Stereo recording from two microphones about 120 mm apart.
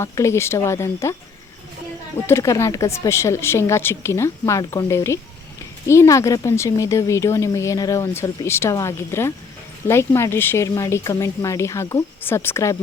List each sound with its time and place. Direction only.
0.0 s speech: 20° left (ahead or behind)
2.2 s speech: 25° left (ahead or behind)